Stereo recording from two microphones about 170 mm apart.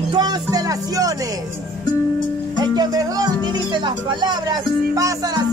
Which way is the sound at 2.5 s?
25° right (ahead or behind).